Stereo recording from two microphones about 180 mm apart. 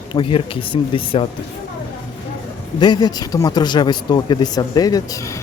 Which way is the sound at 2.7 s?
25° left (ahead or behind).